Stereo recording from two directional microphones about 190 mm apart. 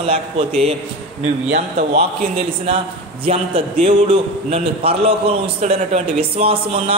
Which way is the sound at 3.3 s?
35° right (ahead or behind).